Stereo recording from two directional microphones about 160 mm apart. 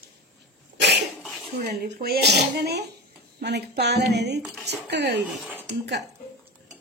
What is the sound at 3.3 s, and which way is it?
Speech, 90° right.